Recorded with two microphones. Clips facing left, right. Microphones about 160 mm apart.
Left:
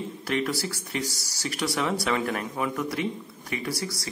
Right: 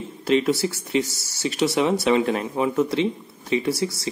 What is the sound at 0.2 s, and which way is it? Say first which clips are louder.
Speech: right 9 dB; 25° right (ahead or behind).